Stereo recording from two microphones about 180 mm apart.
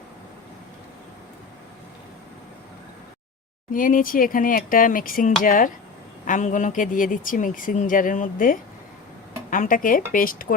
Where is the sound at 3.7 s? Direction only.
50° left (ahead or behind).